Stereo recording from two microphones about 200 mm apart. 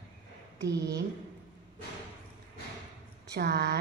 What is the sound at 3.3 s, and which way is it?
Speech, 55° right (ahead or behind).